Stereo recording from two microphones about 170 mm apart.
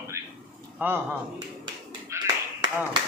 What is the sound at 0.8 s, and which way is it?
Speech, 10° right (ahead or behind).